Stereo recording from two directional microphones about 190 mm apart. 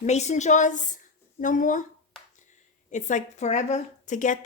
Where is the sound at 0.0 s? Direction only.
35° left (ahead or behind).